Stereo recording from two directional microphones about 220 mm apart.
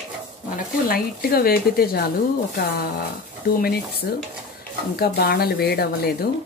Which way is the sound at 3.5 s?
45° left (ahead or behind).